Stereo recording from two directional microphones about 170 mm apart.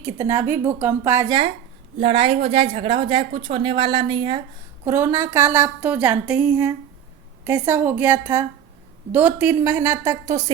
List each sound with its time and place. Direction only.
0.0 s a woman's voice: 15° right (ahead or behind)
1.3 s a woman's voice: 30° right (ahead or behind)
4.9 s a woman's voice: 15° right (ahead or behind)